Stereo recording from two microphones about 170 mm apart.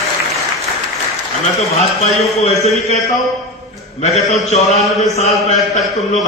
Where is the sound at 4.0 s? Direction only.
40° left (ahead or behind).